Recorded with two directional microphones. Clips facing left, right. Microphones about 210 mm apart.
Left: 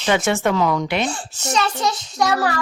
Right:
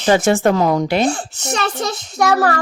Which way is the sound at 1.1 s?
55° right (ahead or behind).